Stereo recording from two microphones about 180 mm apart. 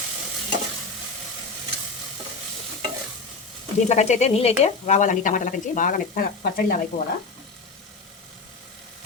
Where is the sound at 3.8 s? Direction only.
40° left (ahead or behind); by 6.8 s 55° left (ahead or behind).